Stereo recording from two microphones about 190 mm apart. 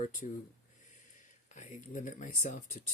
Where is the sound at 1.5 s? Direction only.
40° left (ahead or behind).